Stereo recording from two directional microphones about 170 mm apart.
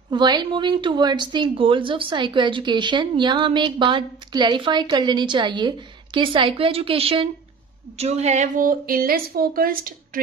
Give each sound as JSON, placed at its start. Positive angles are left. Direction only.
{"t": 0.1, "sound": "a woman's voice", "side_deg": -25}